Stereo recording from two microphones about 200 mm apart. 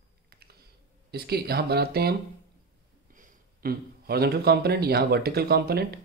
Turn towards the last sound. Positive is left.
turn(degrees=-50)  # may be behind; listen again after turning